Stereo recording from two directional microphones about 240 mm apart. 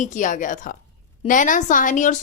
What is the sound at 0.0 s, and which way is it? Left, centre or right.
A woman's voice, left.